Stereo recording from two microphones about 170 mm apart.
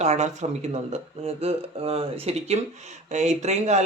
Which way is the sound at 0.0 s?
40° right (ahead or behind).